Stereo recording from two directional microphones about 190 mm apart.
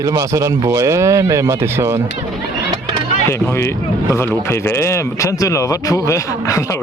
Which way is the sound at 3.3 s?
15° left (ahead or behind).